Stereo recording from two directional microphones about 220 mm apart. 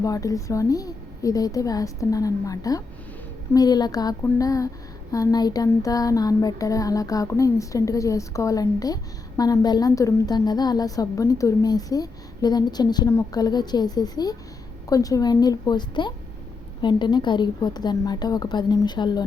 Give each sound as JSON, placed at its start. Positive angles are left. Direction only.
{"t": 0.0, "sound": "a woman's voice", "side_deg": 15}